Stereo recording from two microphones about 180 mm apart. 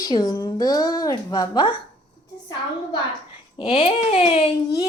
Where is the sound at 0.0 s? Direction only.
20° left (ahead or behind).